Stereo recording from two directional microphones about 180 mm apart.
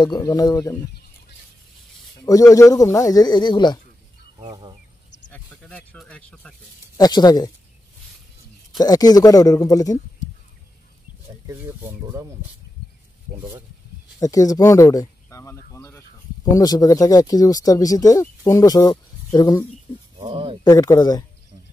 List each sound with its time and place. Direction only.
0.0 s speech: 20° left (ahead or behind)
2.1 s speech: 20° left (ahead or behind)
4.5 s speech: 25° right (ahead or behind)
5.3 s a sound: 5° left (ahead or behind)
5.9 s speech: 5° left (ahead or behind)
7.0 s speech: 20° left (ahead or behind)
8.7 s speech: 20° left (ahead or behind)
11.4 s speech: 15° right (ahead or behind)
14.2 s a sound: 20° left (ahead or behind)
16.5 s speech: 20° left (ahead or behind)
20.2 s a sound: 30° right (ahead or behind)
20.6 s speech: 20° left (ahead or behind)